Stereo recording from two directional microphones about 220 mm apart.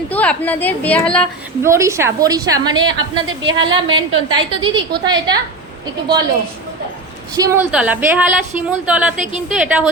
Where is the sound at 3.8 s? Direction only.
60° right (ahead or behind).